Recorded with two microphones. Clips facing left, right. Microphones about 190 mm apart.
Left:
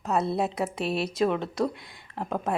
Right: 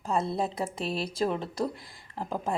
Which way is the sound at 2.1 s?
Centre (ahead or behind).